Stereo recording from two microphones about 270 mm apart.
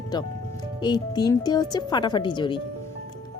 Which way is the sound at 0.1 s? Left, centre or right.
Centre.